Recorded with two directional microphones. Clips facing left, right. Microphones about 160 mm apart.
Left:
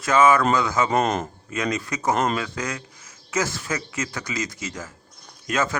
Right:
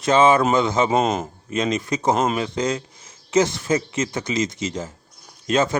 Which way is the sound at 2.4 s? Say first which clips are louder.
Right 6 dB; 25° right (ahead or behind).